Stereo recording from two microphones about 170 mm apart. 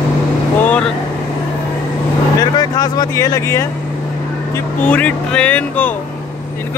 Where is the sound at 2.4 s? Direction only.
25° left (ahead or behind).